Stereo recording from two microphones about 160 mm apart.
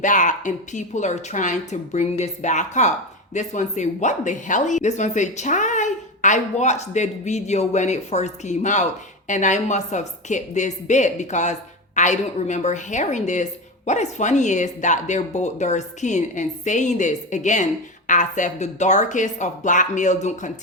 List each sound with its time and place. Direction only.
0.0 s speech: 50° left (ahead or behind)